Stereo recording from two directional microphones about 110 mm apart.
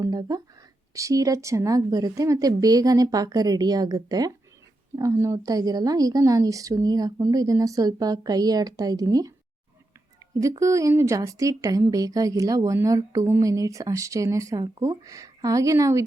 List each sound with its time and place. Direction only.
0.0 s a woman's voice: 35° right (ahead or behind)
10.6 s a woman's voice: 30° right (ahead or behind)